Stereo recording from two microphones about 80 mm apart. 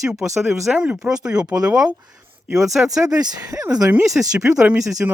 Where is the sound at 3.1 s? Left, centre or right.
Right.